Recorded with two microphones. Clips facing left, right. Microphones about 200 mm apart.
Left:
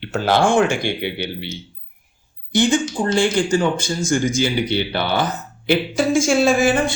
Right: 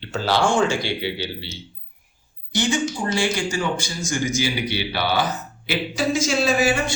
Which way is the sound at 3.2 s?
55° left (ahead or behind).